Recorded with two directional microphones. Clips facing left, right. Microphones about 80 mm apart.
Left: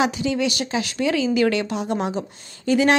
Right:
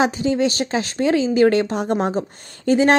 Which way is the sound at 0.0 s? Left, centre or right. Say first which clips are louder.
Right 3 dB; right.